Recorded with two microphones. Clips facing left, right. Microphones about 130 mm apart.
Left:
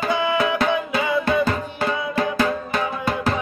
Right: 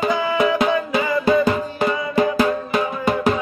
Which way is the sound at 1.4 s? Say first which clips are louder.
Right 3 dB; 15° right (ahead or behind).